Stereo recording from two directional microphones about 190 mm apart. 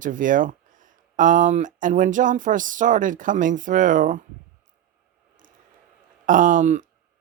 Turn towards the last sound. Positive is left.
turn(degrees=-40)  # may be behind; listen again after turning